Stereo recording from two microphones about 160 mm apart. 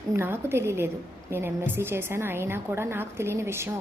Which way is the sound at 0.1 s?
15° right (ahead or behind).